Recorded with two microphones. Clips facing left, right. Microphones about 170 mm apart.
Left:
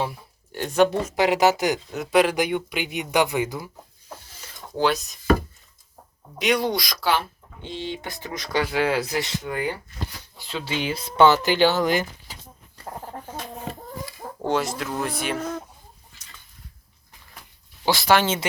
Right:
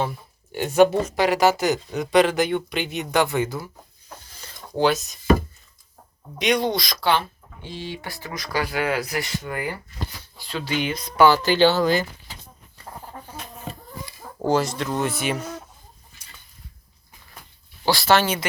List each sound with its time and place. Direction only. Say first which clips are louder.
0.5 s speech: right 3 dB; 10° right (ahead or behind)
1.1 s speech: even; 20° left (ahead or behind)
1.9 s speech: right 2 dB; 5° left (ahead or behind)
4.8 s speech: right 2 dB; centre (ahead or behind)
6.4 s speech: right 1 dB; 5° left (ahead or behind)
7.6 s speech: left 2 dB; 20° left (ahead or behind)
14.4 s speech: right 3 dB; centre (ahead or behind)
15.4 s speech: left 4 dB; 30° left (ahead or behind)
17.8 s speech: right 1 dB; 15° left (ahead or behind)